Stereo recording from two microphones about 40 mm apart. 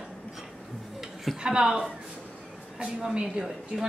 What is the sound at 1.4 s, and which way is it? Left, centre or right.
Speech, right.